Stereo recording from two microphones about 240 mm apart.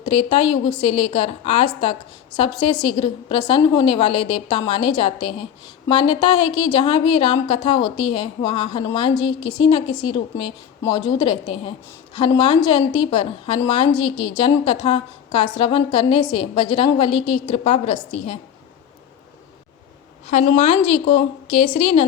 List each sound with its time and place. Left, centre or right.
0.0 s a woman's voice: left
20.2 s a woman's voice: left